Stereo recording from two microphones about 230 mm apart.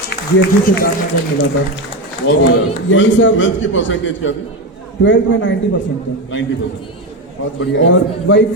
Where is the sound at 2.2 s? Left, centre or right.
Left.